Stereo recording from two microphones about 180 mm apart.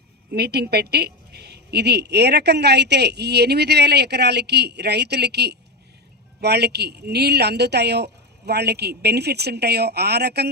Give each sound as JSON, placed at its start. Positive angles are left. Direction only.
{"t": 0.3, "sound": "a woman's voice", "side_deg": -65}